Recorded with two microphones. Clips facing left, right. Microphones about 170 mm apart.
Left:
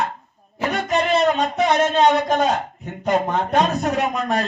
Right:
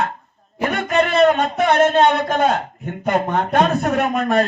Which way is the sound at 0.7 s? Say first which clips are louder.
Right 1 dB; 55° right (ahead or behind).